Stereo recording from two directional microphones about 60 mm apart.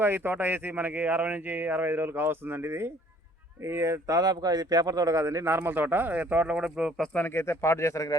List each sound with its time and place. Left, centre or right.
0.0 s speech: right
4.1 s a man's voice: right
5.5 s speech: right
6.5 s speech: centre
7.3 s speech: left